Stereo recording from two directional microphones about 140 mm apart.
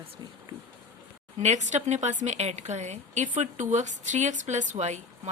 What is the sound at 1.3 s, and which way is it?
Speech, 55° right (ahead or behind).